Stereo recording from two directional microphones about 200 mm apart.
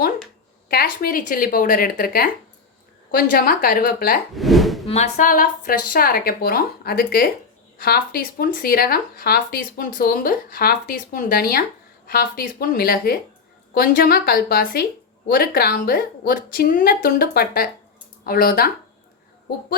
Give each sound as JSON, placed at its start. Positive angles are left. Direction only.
{"t": 0.7, "sound": "speech", "side_deg": 50}
{"t": 4.4, "sound": "a sound", "side_deg": 0}
{"t": 4.9, "sound": "speech", "side_deg": 35}